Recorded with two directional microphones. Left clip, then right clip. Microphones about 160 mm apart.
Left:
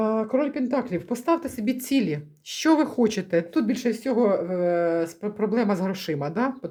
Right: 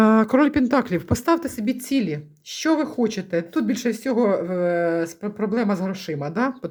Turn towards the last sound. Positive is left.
turn(degrees=-25)  # may be behind; listen again after turning